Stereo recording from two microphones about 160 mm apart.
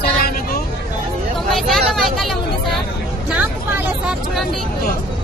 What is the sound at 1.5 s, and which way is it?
Vehicle, centre (ahead or behind).